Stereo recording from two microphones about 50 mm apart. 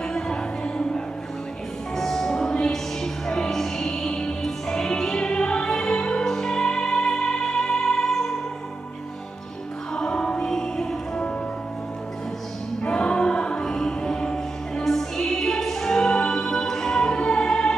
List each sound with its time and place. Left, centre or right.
0.0 s music: centre
9.9 s music: centre
10.5 s music: centre
12.8 s music: centre